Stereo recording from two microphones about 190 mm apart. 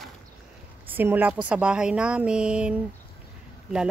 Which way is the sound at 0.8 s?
10° right (ahead or behind).